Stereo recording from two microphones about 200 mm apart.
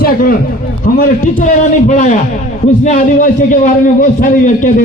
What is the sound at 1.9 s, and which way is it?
A man's voice, 40° left (ahead or behind).